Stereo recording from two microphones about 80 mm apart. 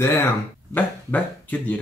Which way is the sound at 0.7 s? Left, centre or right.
Centre.